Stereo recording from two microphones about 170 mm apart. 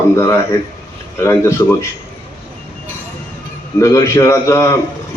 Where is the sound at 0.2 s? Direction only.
15° left (ahead or behind).